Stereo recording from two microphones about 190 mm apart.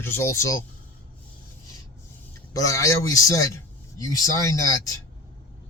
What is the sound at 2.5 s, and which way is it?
A man's voice, 15° left (ahead or behind).